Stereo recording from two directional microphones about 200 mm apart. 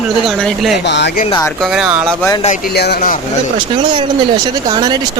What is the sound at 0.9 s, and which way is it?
Speech, 60° left (ahead or behind).